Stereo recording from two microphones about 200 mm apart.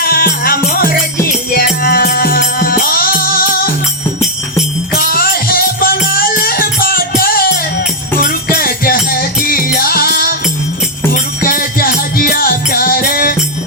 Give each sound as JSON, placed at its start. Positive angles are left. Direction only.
{"t": 0.0, "sound": "music", "side_deg": 45}
{"t": 4.9, "sound": "music", "side_deg": 45}